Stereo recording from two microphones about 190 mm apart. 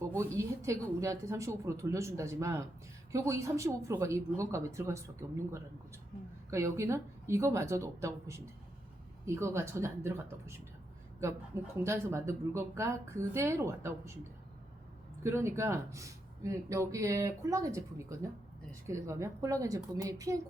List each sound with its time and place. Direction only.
0.3 s speech: 15° right (ahead or behind)
6.5 s speech: 15° right (ahead or behind)
11.8 s speech: 15° right (ahead or behind)
15.2 s speech: 15° right (ahead or behind)